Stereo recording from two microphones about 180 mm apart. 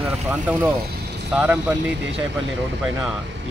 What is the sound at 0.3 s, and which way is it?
Speech, 10° right (ahead or behind).